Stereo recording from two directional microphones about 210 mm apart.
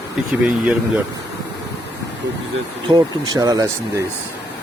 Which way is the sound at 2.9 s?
20° right (ahead or behind).